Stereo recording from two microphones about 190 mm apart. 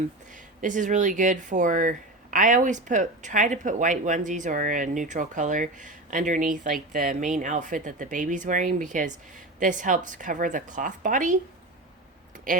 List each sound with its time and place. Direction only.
0.6 s speech: 40° right (ahead or behind)